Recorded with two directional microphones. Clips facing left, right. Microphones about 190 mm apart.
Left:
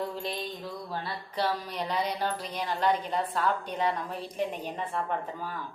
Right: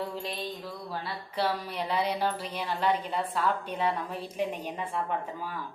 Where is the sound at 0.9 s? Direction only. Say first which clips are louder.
Left 1 dB; 5° right (ahead or behind).